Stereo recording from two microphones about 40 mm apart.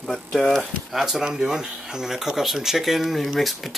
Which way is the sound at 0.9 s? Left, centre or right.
Centre.